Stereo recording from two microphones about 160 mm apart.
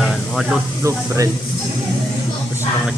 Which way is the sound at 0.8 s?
20° right (ahead or behind).